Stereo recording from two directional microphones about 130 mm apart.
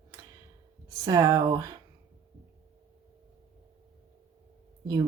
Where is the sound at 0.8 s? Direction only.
25° right (ahead or behind).